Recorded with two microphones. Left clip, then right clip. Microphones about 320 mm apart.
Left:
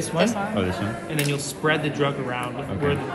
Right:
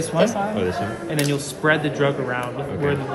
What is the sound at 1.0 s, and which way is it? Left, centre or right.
Speech, right.